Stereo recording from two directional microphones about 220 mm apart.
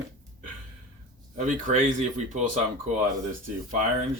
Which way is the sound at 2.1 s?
35° right (ahead or behind).